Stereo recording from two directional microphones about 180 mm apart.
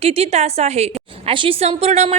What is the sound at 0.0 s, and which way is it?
A woman's voice, 35° right (ahead or behind).